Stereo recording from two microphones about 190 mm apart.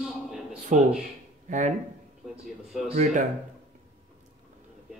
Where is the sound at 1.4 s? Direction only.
40° right (ahead or behind).